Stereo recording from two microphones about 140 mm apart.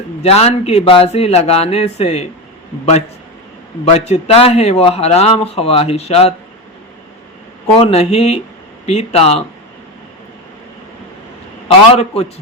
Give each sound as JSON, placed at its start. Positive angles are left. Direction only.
{"t": 0.2, "sound": "a man's voice", "side_deg": 45}
{"t": 3.9, "sound": "a man's voice", "side_deg": 50}
{"t": 7.8, "sound": "a man's voice", "side_deg": 45}
{"t": 11.9, "sound": "a man's voice", "side_deg": 45}